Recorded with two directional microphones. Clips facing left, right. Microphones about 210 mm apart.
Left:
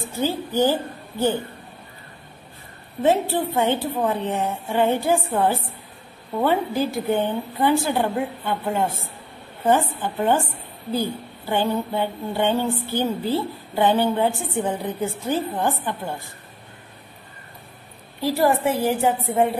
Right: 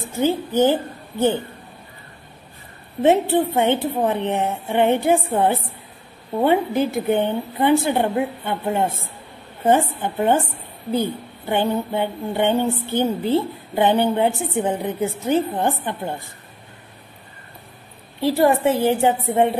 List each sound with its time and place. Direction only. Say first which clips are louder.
0.2 s speech: right 3 dB; 20° right (ahead or behind)
3.0 s speech: right 4 dB; 20° right (ahead or behind)
18.2 s speech: right 3 dB; 25° right (ahead or behind)